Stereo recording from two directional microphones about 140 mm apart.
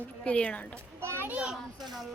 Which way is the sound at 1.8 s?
30° right (ahead or behind).